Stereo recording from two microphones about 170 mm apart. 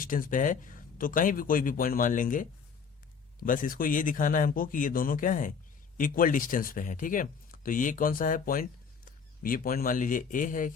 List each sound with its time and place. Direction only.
0.0 s a man's voice: 55° left (ahead or behind)